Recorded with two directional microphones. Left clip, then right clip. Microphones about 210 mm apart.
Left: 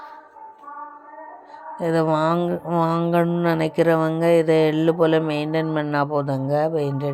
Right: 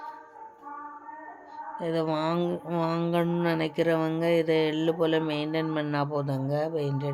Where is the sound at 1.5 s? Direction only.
20° left (ahead or behind).